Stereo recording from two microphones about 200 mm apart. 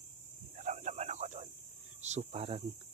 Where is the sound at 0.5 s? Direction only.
35° right (ahead or behind).